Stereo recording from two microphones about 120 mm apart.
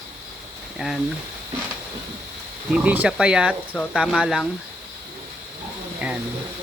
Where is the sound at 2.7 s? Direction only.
10° right (ahead or behind).